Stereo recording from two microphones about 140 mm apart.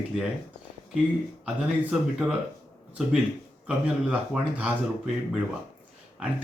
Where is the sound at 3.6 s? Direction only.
10° right (ahead or behind).